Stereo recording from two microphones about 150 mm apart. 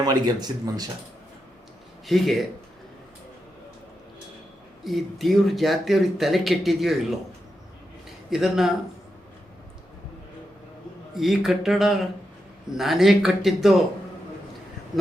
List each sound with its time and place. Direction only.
0.0 s speech: 25° right (ahead or behind)
2.0 s speech: centre (ahead or behind)
4.8 s speech: centre (ahead or behind)
8.3 s speech: 5° right (ahead or behind)
11.1 s speech: centre (ahead or behind)